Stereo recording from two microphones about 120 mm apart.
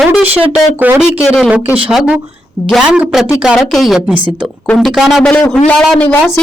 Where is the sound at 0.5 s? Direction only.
10° right (ahead or behind); by 6.1 s 10° left (ahead or behind).